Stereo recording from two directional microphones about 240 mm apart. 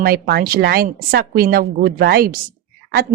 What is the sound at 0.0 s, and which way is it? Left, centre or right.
Speech, right.